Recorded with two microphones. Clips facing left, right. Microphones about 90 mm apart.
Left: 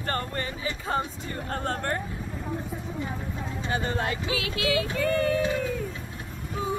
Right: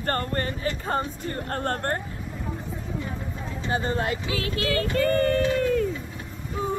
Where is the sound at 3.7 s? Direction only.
30° right (ahead or behind).